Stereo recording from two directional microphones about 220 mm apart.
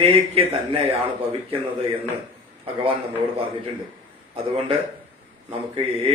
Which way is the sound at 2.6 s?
25° right (ahead or behind).